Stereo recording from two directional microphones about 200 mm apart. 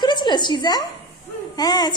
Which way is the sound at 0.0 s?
20° left (ahead or behind).